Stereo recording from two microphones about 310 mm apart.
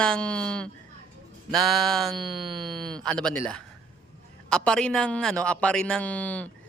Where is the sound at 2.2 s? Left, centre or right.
Centre.